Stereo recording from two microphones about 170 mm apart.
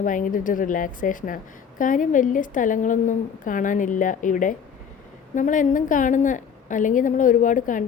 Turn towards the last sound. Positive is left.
turn(degrees=50)  # may be behind; listen again after turning